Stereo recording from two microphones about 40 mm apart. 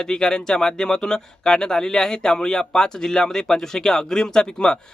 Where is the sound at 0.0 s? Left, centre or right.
Centre.